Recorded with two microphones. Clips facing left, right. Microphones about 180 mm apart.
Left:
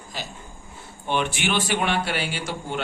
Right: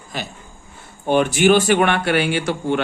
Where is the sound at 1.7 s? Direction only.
60° right (ahead or behind).